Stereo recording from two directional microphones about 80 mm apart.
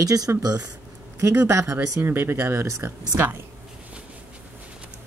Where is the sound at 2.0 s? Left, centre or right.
Right.